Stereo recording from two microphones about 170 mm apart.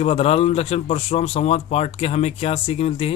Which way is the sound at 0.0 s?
35° left (ahead or behind).